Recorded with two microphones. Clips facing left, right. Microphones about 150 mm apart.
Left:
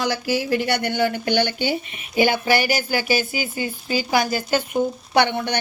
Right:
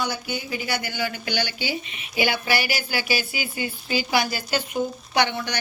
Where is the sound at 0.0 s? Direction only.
90° left.